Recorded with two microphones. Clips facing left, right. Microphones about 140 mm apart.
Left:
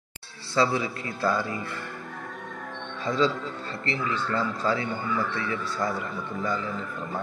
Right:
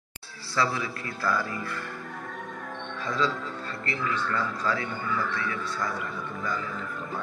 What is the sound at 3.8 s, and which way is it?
A man's voice, 30° left (ahead or behind).